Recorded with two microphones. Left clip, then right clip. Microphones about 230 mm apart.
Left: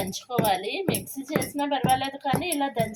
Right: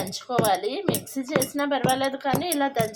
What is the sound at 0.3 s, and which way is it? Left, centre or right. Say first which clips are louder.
A woman's voice: right 2 dB; right.